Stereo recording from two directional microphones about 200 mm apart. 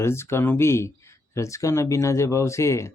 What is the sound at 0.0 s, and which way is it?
Speech, 15° left (ahead or behind).